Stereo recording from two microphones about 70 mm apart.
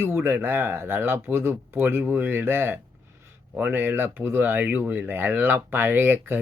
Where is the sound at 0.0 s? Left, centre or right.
Right.